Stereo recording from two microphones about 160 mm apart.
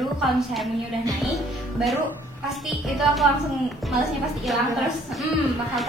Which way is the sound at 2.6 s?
Centre (ahead or behind).